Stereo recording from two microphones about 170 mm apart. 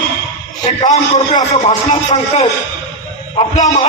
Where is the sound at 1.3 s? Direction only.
45° left (ahead or behind).